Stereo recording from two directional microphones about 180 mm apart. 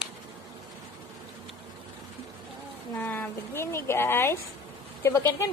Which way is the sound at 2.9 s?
10° left (ahead or behind).